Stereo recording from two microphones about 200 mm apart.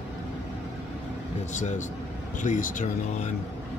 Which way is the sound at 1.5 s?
40° left (ahead or behind).